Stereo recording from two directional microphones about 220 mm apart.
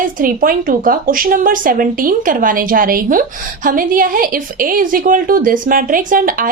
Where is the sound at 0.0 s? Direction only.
40° right (ahead or behind).